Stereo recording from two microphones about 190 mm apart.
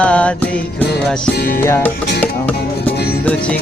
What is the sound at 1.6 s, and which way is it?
Music, 10° left (ahead or behind).